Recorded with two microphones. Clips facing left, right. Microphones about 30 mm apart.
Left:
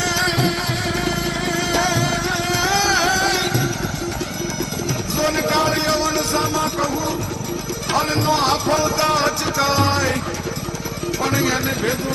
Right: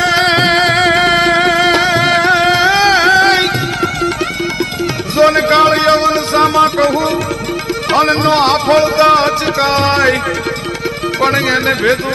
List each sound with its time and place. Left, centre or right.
0.0 s music: right
5.1 s a sound: right
7.9 s music: right
11.2 s speech: right